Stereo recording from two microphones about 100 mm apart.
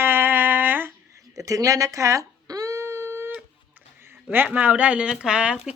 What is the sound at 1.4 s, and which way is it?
Guitar, 35° right (ahead or behind).